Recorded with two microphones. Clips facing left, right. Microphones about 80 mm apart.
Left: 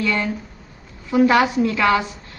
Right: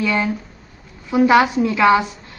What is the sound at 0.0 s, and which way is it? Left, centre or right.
A woman's voice, centre.